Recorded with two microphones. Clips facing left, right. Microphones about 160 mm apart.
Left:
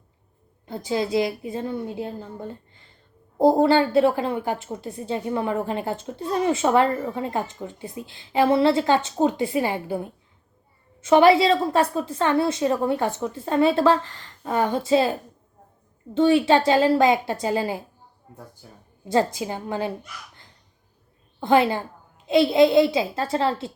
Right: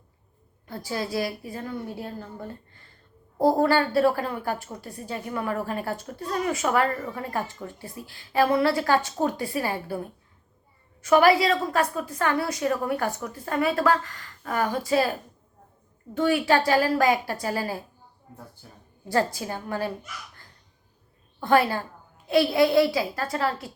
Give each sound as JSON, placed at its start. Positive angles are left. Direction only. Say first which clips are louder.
{"t": 0.6, "sound": "a woman's voice", "louder": "left 6 dB", "side_deg": 20}
{"t": 16.1, "sound": "a woman's voice", "louder": "left 4 dB", "side_deg": 25}
{"t": 19.0, "sound": "a woman's voice", "louder": "left 3 dB", "side_deg": 20}
{"t": 21.4, "sound": "a woman's voice", "louder": "left 2 dB", "side_deg": 20}